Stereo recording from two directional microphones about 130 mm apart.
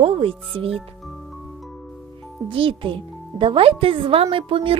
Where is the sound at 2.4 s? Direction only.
40° right (ahead or behind).